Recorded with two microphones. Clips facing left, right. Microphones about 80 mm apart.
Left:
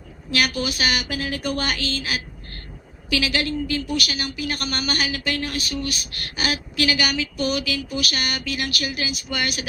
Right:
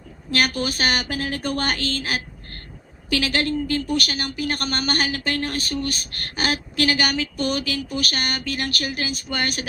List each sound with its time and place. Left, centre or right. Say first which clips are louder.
0.3 s a woman's voice: right 1 dB; right